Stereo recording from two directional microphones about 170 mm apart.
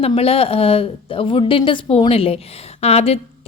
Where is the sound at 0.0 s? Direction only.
35° left (ahead or behind).